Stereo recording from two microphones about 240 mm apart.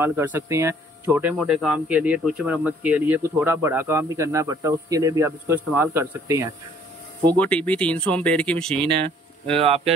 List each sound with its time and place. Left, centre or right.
0.0 s speech: centre
7.3 s speech: centre
9.6 s speech: right